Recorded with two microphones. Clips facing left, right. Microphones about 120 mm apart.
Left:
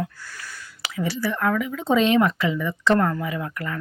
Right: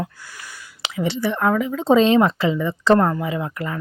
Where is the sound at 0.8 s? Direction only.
25° right (ahead or behind).